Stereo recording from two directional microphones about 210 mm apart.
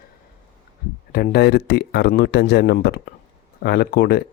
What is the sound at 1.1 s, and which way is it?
Speech, 50° left (ahead or behind).